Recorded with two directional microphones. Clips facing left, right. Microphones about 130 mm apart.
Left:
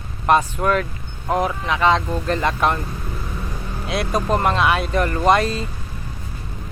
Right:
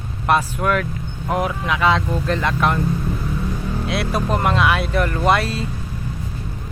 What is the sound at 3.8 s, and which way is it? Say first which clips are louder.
Speech: left 2 dB; centre (ahead or behind).